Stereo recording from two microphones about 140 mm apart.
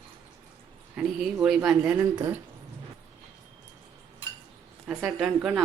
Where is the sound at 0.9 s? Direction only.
5° right (ahead or behind).